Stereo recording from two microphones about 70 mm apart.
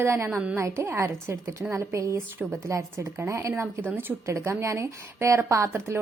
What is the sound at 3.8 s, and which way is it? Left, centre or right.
Speech, right.